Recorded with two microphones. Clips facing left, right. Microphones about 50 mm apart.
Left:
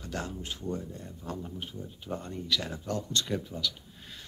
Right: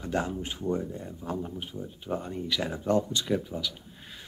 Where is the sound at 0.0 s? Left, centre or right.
Right.